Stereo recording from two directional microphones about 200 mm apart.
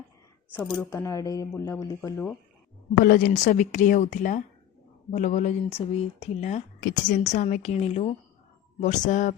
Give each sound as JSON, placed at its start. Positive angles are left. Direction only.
{"t": 0.5, "sound": "speech", "side_deg": 10}
{"t": 3.0, "sound": "speech", "side_deg": 50}
{"t": 6.7, "sound": "a woman's voice", "side_deg": 50}
{"t": 7.2, "sound": "speech", "side_deg": 35}